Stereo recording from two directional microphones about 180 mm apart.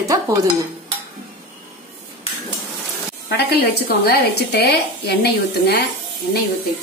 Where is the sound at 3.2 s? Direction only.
65° left (ahead or behind).